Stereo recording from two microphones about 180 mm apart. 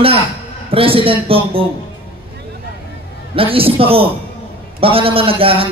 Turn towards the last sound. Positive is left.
turn(degrees=-30)  # may be behind; listen again after turning